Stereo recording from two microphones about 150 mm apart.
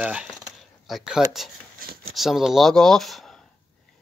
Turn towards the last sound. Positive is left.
turn(degrees=0)  # may be behind; listen again after turning